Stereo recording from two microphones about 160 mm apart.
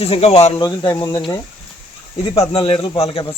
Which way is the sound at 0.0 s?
40° left (ahead or behind).